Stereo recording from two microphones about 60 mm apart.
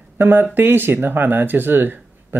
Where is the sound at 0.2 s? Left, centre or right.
Right.